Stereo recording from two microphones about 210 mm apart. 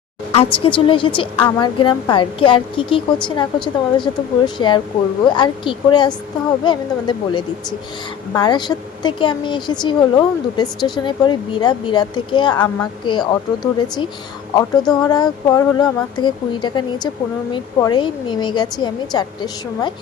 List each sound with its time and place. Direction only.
0.3 s speech: 25° left (ahead or behind)